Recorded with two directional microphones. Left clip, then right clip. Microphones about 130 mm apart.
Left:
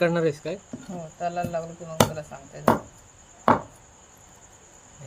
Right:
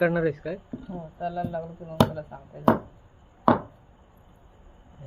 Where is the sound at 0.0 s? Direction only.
25° left (ahead or behind).